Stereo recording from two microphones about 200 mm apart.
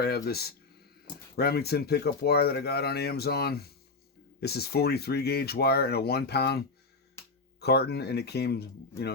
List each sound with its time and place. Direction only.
0.0 s speech: 50° left (ahead or behind)